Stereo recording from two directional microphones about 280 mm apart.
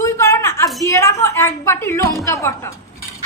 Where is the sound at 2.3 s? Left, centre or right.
Centre.